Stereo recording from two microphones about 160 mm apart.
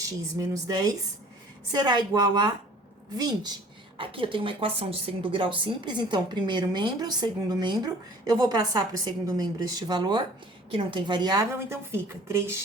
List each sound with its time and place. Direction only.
0.0 s speech: 20° right (ahead or behind)